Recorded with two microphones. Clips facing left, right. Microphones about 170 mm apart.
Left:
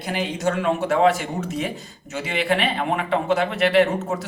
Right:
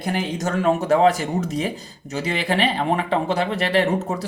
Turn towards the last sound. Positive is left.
turn(degrees=-35)  # may be behind; listen again after turning